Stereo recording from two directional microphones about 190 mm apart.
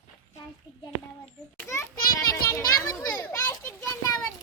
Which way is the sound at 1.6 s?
15° left (ahead or behind).